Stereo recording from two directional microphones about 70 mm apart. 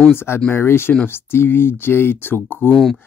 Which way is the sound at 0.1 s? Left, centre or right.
Left.